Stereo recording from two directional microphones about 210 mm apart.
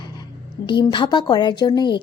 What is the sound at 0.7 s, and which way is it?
Speech, 20° left (ahead or behind).